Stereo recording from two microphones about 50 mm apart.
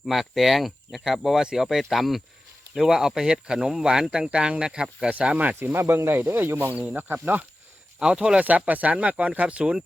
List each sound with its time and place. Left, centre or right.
0.0 s speech: centre; by 5.5 s right
5.8 s speech: right
6.1 s speech: right
7.9 s speech: centre
8.4 s speech: right